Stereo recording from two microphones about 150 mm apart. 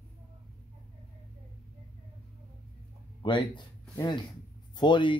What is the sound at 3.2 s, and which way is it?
Speech, 30° left (ahead or behind).